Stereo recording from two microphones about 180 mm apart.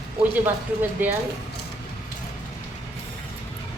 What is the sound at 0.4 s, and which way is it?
Speech, 10° right (ahead or behind).